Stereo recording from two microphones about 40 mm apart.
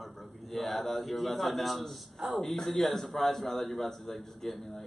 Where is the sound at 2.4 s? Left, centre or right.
Centre.